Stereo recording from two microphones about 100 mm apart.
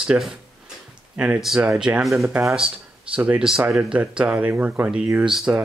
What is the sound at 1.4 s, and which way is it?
Speech, 5° right (ahead or behind).